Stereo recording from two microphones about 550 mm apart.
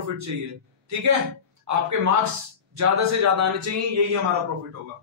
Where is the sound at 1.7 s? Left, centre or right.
Right.